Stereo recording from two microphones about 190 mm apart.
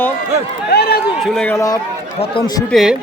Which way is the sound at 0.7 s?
55° left (ahead or behind).